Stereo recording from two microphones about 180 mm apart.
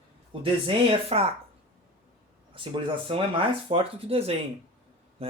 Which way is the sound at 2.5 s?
30° right (ahead or behind).